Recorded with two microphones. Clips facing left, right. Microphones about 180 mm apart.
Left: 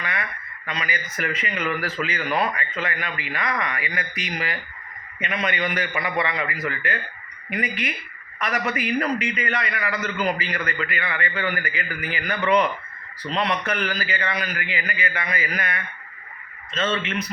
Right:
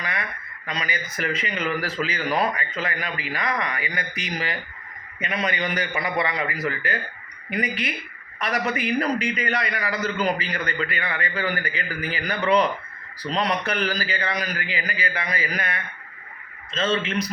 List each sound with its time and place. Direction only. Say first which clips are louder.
0.0 s speech: even; 35° right (ahead or behind)